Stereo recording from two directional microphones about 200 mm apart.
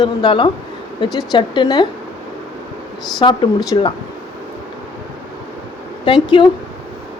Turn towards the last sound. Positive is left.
turn(degrees=25)  # may be behind; listen again after turning